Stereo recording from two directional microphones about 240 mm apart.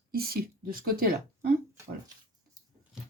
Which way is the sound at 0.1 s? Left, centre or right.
Right.